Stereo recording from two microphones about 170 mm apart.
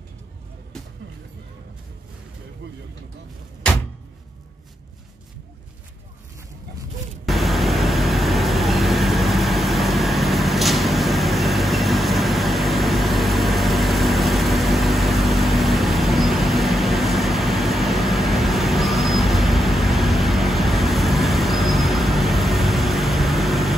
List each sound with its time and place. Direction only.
7.2 s vehicle: centre (ahead or behind)